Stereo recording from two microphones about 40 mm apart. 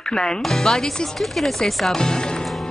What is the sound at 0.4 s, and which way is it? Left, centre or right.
Speech, centre.